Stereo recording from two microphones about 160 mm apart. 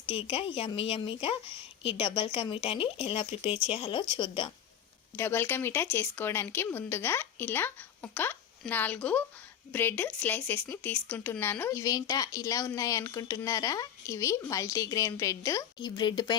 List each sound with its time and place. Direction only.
0.0 s speech: 35° left (ahead or behind)
5.1 s speech: 15° left (ahead or behind)